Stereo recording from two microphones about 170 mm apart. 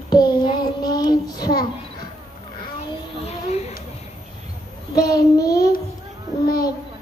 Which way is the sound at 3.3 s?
40° left (ahead or behind).